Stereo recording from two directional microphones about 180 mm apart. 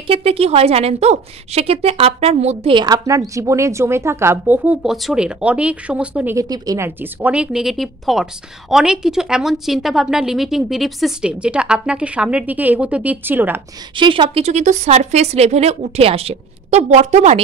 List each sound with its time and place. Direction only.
0.0 s a woman's voice: 30° right (ahead or behind); by 6.3 s 5° right (ahead or behind)
6.3 s a woman's voice: 20° right (ahead or behind)
13.9 s a woman's voice: 25° right (ahead or behind)